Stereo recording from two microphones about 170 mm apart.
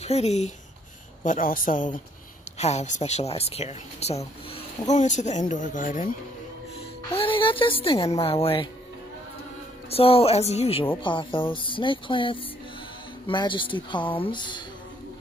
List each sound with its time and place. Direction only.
0.0 s speech: 40° left (ahead or behind)
1.2 s a woman's voice: 50° left (ahead or behind)
2.6 s a woman's voice: 40° left (ahead or behind)
7.2 s speech: 30° left (ahead or behind)
9.8 s speech: 35° left (ahead or behind)